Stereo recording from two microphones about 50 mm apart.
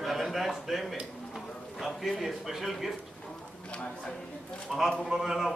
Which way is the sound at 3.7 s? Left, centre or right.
Left.